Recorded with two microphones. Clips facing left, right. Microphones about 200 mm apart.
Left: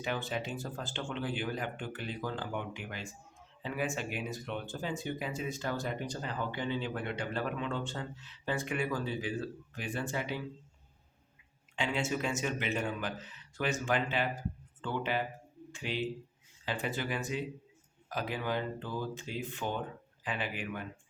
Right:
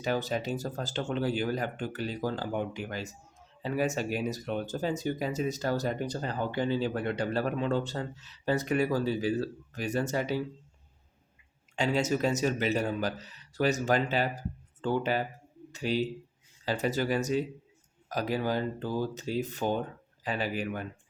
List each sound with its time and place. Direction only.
0.0 s speech: 40° right (ahead or behind)
11.8 s speech: 40° right (ahead or behind)